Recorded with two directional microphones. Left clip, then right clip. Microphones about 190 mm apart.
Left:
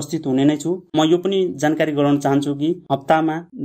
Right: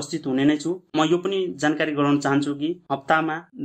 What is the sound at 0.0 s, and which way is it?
Speech, 35° left (ahead or behind).